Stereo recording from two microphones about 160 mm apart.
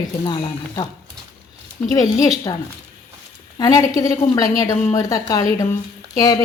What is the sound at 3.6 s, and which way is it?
A woman's voice, 20° left (ahead or behind).